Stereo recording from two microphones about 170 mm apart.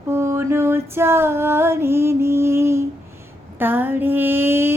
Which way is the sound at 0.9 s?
15° right (ahead or behind).